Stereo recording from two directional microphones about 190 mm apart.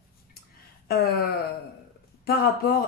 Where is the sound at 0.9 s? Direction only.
55° left (ahead or behind).